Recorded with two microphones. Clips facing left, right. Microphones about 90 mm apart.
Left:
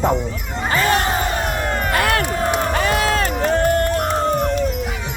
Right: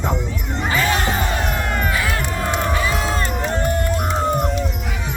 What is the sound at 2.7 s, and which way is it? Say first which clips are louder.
Run: left 3 dB; 55° left (ahead or behind).